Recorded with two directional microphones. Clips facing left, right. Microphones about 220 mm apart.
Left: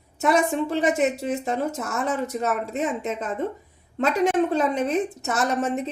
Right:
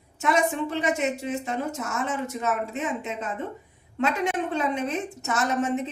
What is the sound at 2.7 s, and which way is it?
Speech, 35° left (ahead or behind).